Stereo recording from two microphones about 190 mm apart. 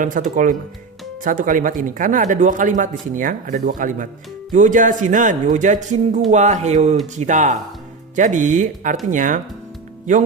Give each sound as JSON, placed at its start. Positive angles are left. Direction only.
{"t": 0.0, "sound": "speech", "side_deg": -45}